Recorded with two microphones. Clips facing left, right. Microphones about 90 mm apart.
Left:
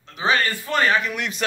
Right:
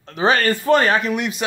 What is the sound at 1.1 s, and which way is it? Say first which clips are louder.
Speech: right 5 dB; 15° right (ahead or behind).